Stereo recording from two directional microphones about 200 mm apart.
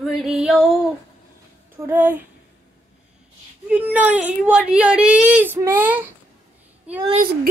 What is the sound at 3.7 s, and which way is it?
A woman's voice, 5° right (ahead or behind).